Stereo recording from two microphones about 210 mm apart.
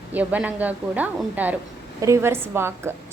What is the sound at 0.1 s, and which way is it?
A woman's voice, 5° right (ahead or behind).